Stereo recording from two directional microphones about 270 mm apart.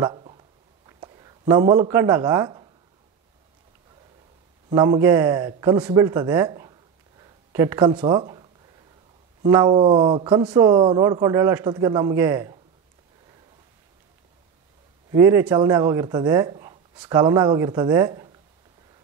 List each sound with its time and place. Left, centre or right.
0.0 s a sound: centre
4.6 s a man's voice: centre
15.0 s speech: centre